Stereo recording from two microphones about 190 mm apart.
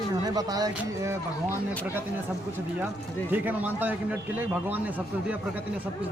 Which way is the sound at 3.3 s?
10° right (ahead or behind).